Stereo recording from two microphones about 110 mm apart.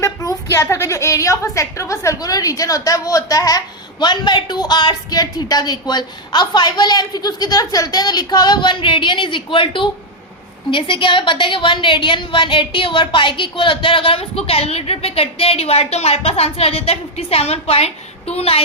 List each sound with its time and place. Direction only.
0.0 s a woman's voice: 30° left (ahead or behind); by 18.6 s 65° left (ahead or behind)